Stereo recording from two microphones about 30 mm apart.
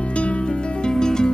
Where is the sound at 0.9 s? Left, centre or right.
Left.